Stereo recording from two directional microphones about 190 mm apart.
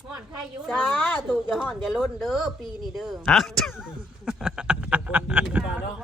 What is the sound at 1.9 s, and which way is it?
A woman's voice, centre (ahead or behind).